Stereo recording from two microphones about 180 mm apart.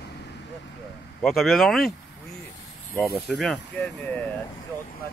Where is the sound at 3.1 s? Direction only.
Centre (ahead or behind).